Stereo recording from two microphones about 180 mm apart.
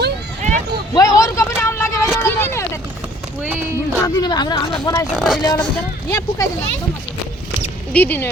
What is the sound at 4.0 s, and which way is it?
Speech, 25° left (ahead or behind).